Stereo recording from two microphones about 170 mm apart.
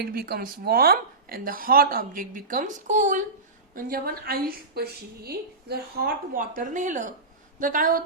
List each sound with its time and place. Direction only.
0.0 s a woman's voice: 65° right (ahead or behind); by 3.2 s 50° right (ahead or behind)
3.8 s a woman's voice: 60° right (ahead or behind)